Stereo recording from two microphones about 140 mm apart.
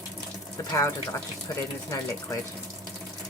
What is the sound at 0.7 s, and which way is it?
Speech, 20° left (ahead or behind).